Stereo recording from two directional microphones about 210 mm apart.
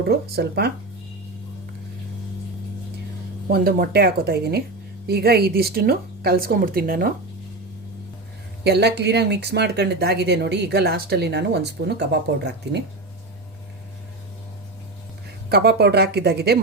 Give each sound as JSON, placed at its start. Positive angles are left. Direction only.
{"t": 0.0, "sound": "speech", "side_deg": -50}
{"t": 3.5, "sound": "speech", "side_deg": -45}
{"t": 8.6, "sound": "speech", "side_deg": -50}
{"t": 15.4, "sound": "speech", "side_deg": -50}